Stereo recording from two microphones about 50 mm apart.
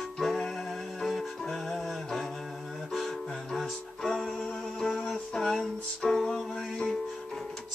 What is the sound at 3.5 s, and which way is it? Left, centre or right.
Music, centre.